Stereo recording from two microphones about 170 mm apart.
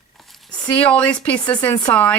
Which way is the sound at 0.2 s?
Centre (ahead or behind).